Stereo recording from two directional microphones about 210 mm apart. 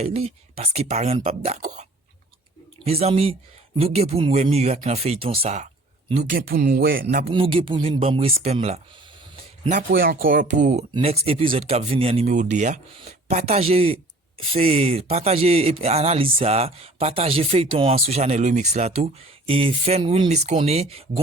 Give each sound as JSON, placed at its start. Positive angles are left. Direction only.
{"t": 0.0, "sound": "speech", "side_deg": -30}
{"t": 6.3, "sound": "speech", "side_deg": -45}
{"t": 7.3, "sound": "speech", "side_deg": -25}